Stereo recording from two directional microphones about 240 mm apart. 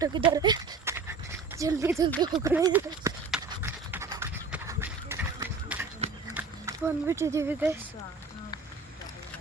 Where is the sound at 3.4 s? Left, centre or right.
Centre.